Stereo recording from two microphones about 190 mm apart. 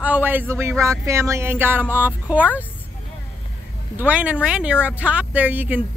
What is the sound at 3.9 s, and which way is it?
Speech, 10° right (ahead or behind).